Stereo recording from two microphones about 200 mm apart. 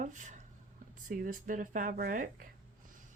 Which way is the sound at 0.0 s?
40° right (ahead or behind).